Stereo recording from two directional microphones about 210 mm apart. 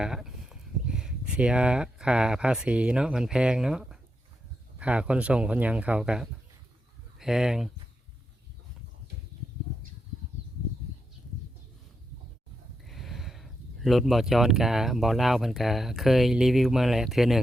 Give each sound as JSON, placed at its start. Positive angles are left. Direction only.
{"t": 0.0, "sound": "speech", "side_deg": -5}
{"t": 12.9, "sound": "speech", "side_deg": 0}